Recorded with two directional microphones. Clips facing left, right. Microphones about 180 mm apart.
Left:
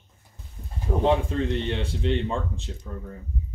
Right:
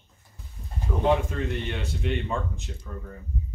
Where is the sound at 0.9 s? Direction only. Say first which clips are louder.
Left 4 dB; 40° left (ahead or behind).